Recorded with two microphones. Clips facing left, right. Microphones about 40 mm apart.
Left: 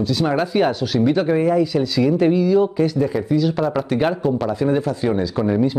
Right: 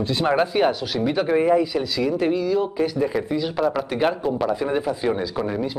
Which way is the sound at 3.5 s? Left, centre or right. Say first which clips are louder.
Left 2 dB; centre.